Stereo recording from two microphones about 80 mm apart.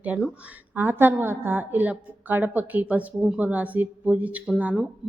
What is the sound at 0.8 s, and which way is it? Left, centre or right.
A woman's voice, right.